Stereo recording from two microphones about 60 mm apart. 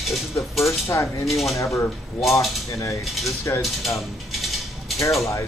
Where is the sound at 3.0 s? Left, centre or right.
Centre.